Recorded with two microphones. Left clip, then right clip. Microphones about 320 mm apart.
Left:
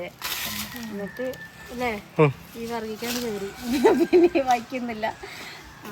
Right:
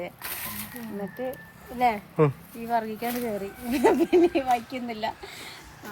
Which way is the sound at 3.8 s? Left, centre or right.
Centre.